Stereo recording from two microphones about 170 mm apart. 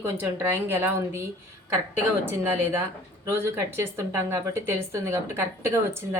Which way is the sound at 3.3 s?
15° right (ahead or behind).